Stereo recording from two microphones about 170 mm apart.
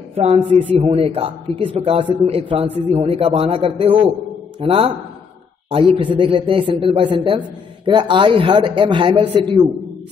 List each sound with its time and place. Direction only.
0.1 s a man's voice: 40° right (ahead or behind)